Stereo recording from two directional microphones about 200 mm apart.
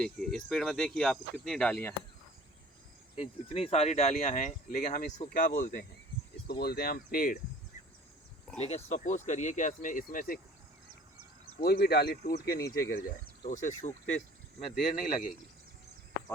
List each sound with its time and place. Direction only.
0.0 s speech: centre (ahead or behind)
3.5 s speech: 30° left (ahead or behind)
6.5 s speech: 50° left (ahead or behind)
8.5 s speech: 30° left (ahead or behind)
11.6 s speech: 50° left (ahead or behind)
12.2 s speech: 45° left (ahead or behind)
13.4 s speech: 40° left (ahead or behind)